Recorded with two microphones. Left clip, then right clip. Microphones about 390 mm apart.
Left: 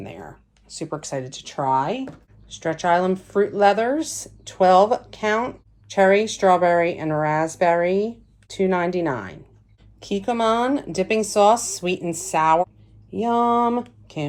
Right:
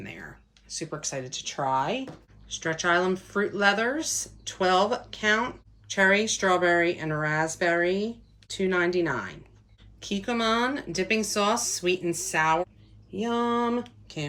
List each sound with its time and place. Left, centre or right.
0.7 s a woman's voice: centre